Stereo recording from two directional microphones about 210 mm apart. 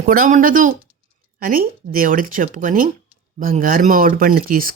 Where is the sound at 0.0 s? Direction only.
40° right (ahead or behind).